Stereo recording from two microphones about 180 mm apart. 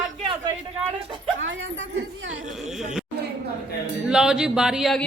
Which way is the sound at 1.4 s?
90° right.